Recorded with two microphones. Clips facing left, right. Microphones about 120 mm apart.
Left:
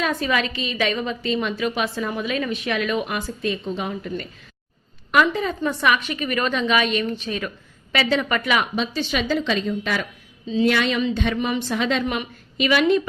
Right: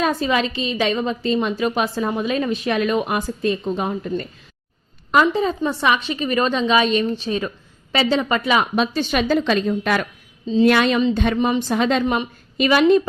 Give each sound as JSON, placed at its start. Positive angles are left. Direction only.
{"t": 0.0, "sound": "a woman's voice", "side_deg": -30}
{"t": 8.7, "sound": "a woman's voice", "side_deg": -55}
{"t": 10.4, "sound": "speech", "side_deg": -30}
{"t": 10.7, "sound": "a woman's voice", "side_deg": -45}
{"t": 11.3, "sound": "a woman's voice", "side_deg": -35}